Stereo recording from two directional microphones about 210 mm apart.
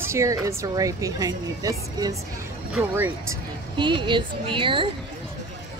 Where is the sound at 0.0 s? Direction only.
15° right (ahead or behind).